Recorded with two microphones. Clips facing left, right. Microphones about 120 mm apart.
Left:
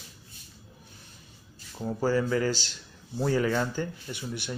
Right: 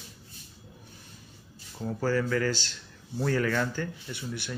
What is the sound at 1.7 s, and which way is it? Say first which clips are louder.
Speech: left 2 dB; 15° left (ahead or behind).